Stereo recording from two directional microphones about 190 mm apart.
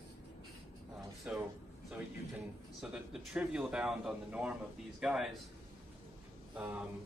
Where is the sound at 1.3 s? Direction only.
5° right (ahead or behind).